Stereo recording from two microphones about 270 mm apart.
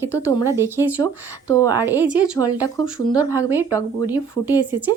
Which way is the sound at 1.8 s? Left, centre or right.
Centre.